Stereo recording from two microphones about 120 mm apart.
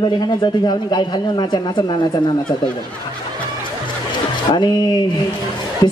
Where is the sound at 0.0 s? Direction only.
40° left (ahead or behind).